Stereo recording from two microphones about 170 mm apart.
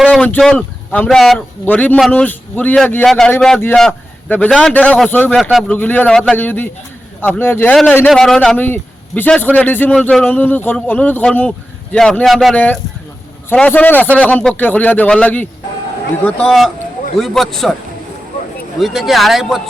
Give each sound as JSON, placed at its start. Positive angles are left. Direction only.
{"t": 0.0, "sound": "a man's voice", "side_deg": 5}
{"t": 5.4, "sound": "speech", "side_deg": 0}
{"t": 5.7, "sound": "a man's voice", "side_deg": 10}
{"t": 18.8, "sound": "speech", "side_deg": 0}